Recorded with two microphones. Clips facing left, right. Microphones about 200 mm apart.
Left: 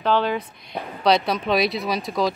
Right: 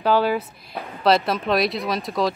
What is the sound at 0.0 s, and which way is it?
A woman's voice, 10° right (ahead or behind).